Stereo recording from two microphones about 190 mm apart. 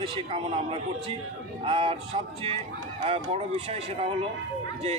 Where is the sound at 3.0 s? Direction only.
35° right (ahead or behind).